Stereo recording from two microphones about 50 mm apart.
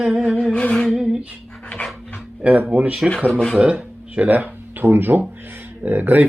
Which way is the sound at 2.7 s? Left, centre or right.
Right.